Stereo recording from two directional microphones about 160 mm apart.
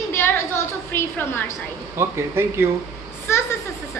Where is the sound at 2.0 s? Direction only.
15° right (ahead or behind).